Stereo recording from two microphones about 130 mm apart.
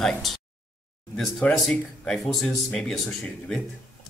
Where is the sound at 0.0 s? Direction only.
5° left (ahead or behind).